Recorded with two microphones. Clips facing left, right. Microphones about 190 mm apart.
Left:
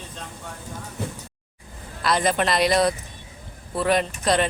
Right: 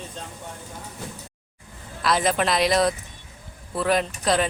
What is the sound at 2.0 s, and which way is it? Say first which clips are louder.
Speech: even; centre (ahead or behind).